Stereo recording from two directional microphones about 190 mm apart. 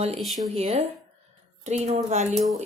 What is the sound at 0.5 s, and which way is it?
A woman's voice, 35° right (ahead or behind).